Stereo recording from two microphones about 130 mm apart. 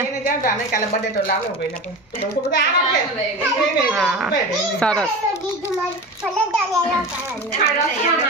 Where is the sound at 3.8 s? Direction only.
5° right (ahead or behind).